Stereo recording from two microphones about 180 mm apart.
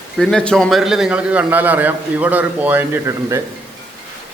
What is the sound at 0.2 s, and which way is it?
A man's voice, 5° left (ahead or behind).